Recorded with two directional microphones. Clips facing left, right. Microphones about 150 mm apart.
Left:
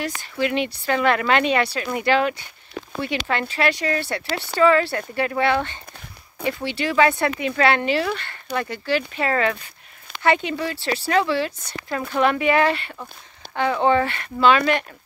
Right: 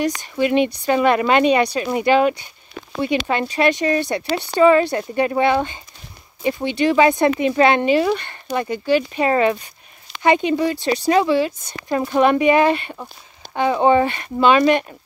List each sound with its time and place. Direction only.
0.0 s speech: 20° right (ahead or behind)